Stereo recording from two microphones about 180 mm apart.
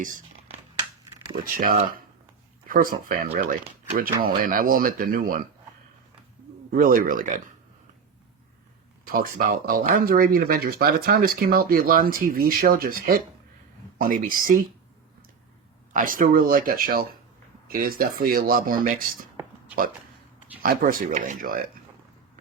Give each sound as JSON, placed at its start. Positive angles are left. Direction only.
{"t": 1.5, "sound": "speech", "side_deg": -45}
{"t": 6.7, "sound": "speech", "side_deg": -50}
{"t": 9.0, "sound": "speech", "side_deg": -50}
{"t": 15.9, "sound": "speech", "side_deg": -50}
{"t": 20.6, "sound": "speech", "side_deg": -50}